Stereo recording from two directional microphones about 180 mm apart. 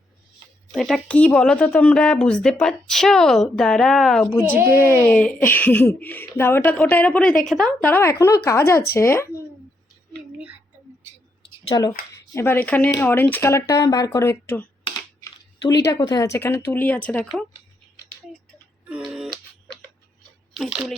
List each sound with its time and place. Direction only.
0.7 s a woman's voice: centre (ahead or behind)
11.7 s speech: 20° left (ahead or behind)
14.9 s a sound: 25° left (ahead or behind)
15.9 s speech: 20° left (ahead or behind)
18.9 s music: 5° right (ahead or behind)
20.6 s a woman's voice: centre (ahead or behind)